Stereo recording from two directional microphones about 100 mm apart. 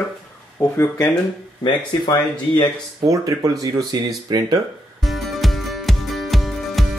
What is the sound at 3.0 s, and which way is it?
Speech, 35° right (ahead or behind).